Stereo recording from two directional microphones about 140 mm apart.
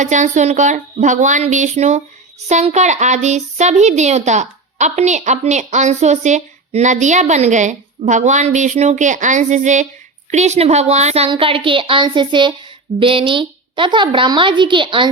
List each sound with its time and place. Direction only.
0.0 s a woman's voice: 60° right (ahead or behind)
11.3 s a woman's voice: 40° right (ahead or behind)